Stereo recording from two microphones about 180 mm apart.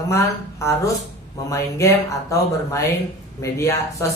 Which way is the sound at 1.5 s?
15° left (ahead or behind).